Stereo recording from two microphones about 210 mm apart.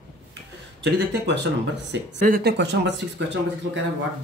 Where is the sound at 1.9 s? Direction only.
45° right (ahead or behind).